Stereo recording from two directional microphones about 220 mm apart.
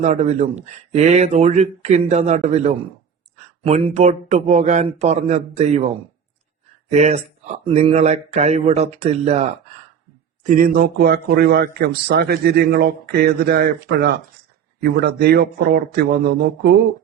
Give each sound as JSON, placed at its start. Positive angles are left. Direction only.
{"t": 0.0, "sound": "speech", "side_deg": -30}
{"t": 6.9, "sound": "a man's voice", "side_deg": -30}